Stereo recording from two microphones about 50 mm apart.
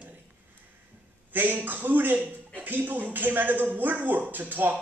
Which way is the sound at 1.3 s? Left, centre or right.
Right.